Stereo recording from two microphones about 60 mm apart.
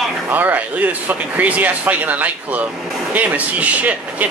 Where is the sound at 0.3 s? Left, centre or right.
Right.